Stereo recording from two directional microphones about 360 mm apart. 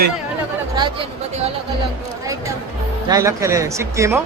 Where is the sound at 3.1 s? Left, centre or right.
Centre.